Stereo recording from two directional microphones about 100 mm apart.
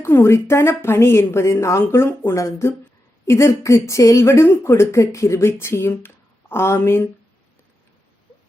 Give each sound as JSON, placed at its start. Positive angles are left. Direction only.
{"t": 0.0, "sound": "speech", "side_deg": 25}